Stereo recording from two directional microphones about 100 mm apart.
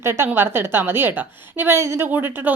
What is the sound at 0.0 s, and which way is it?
A woman's voice, 25° right (ahead or behind).